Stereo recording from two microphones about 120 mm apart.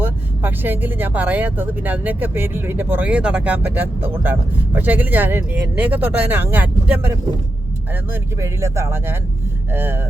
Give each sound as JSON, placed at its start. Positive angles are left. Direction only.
{"t": 0.0, "sound": "speech", "side_deg": -15}
{"t": 8.1, "sound": "speech", "side_deg": -25}